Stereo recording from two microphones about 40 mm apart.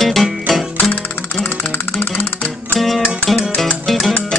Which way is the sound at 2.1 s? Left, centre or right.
Left.